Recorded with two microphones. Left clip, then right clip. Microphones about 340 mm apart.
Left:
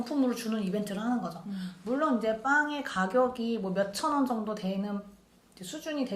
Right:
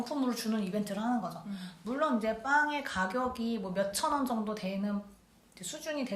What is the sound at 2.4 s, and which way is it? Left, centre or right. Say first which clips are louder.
Speech: right 1 dB; right.